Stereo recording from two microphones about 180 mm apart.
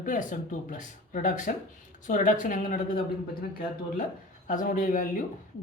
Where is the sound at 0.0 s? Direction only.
45° left (ahead or behind).